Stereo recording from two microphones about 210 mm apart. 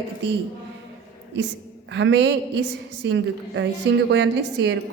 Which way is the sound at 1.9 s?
60° right (ahead or behind).